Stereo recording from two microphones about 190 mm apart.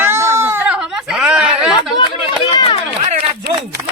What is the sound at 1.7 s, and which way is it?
Chatter, 20° left (ahead or behind).